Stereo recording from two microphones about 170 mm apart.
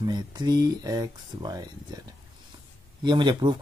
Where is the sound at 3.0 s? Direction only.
25° right (ahead or behind).